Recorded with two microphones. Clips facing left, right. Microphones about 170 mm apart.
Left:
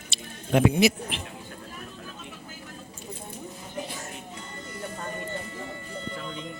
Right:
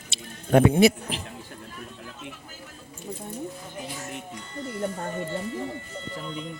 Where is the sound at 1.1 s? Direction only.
40° right (ahead or behind).